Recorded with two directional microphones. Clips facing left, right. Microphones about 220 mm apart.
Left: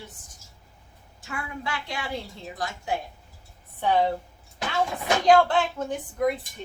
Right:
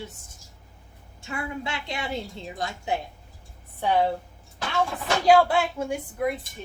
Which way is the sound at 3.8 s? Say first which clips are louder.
Even; 5° right (ahead or behind).